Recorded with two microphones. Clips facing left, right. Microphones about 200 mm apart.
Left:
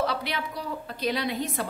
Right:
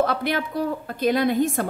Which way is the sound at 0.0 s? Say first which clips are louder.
Right 6 dB; 50° right (ahead or behind).